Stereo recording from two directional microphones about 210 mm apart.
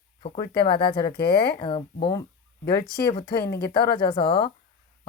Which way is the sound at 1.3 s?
50° left (ahead or behind).